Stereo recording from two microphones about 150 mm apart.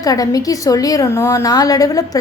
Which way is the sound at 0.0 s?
25° left (ahead or behind).